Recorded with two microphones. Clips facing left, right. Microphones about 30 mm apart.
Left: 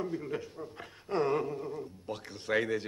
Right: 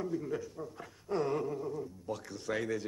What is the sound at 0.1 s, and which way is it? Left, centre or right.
A man's voice, left.